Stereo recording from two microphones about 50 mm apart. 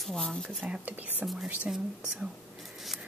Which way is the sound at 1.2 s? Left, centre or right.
Centre.